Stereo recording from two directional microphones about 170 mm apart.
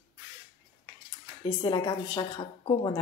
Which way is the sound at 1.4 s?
25° left (ahead or behind).